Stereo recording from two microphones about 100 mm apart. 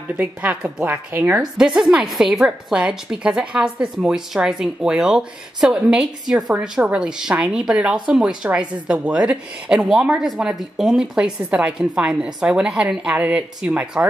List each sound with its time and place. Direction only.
0.2 s speech: 15° right (ahead or behind)
1.4 s speech: 5° right (ahead or behind)